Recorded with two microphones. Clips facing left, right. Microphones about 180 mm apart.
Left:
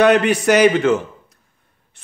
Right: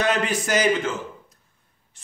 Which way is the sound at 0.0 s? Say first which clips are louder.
Left 10 dB; 70° left (ahead or behind).